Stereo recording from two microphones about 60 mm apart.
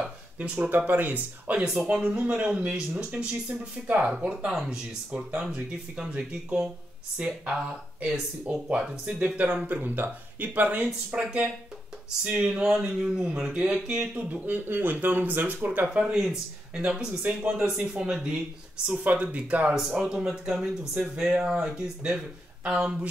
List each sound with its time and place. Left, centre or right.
0.6 s speech: right
1.6 s speech: centre
3.8 s speech: right
11.1 s speech: centre
15.9 s speech: centre
19.7 s speech: centre
22.6 s speech: centre